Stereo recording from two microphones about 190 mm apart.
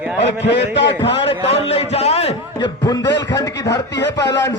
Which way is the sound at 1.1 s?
30° left (ahead or behind).